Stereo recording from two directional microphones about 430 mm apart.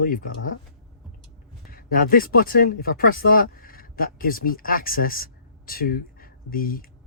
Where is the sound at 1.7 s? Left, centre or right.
Centre.